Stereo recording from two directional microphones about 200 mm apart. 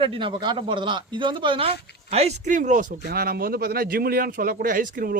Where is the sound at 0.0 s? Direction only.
25° right (ahead or behind).